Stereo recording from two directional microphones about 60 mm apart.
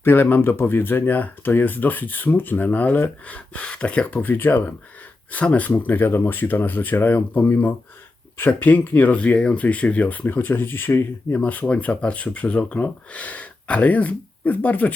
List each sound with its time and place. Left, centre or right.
0.0 s speech: left